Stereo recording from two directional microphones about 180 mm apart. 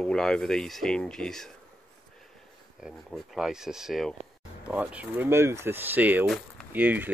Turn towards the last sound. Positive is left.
turn(degrees=-10)  # may be behind; listen again after turning